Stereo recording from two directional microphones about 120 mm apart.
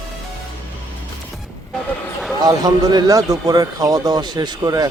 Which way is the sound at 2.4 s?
35° right (ahead or behind).